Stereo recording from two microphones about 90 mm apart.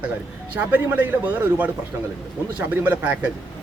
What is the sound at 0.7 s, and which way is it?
A man's voice, 20° right (ahead or behind).